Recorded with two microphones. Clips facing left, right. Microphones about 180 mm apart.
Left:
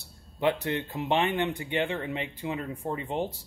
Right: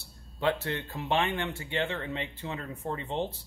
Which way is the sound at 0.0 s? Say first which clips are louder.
Left 2 dB; 15° left (ahead or behind).